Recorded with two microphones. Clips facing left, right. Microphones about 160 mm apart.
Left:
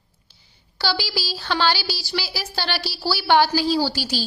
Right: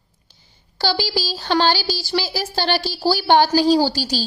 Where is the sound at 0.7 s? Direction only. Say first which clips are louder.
Right 4 dB; 45° right (ahead or behind).